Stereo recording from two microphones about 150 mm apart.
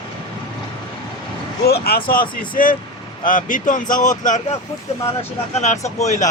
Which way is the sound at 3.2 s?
60° left (ahead or behind).